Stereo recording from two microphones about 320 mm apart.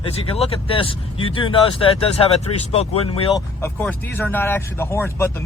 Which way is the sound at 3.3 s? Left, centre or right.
Centre.